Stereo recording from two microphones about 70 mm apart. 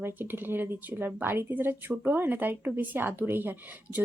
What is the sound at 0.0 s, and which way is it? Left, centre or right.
A woman's voice, right.